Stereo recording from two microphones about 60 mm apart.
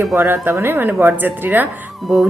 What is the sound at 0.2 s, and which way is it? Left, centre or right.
A woman's voice, right.